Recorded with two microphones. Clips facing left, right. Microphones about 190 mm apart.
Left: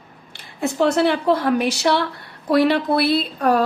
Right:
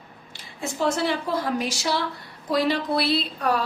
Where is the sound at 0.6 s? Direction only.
65° left (ahead or behind).